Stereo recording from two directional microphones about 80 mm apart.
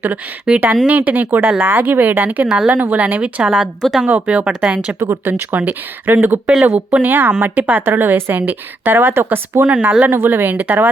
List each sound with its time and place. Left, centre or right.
0.0 s a woman's voice: centre
4.9 s speech: right
5.3 s a woman's voice: right
6.5 s speech: centre
6.7 s a woman's voice: centre